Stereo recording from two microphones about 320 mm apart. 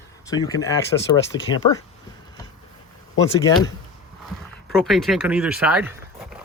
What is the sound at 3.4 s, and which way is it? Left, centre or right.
Speech, centre.